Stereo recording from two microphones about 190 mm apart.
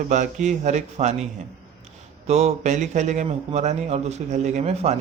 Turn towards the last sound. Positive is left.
turn(degrees=-35)  # may be behind; listen again after turning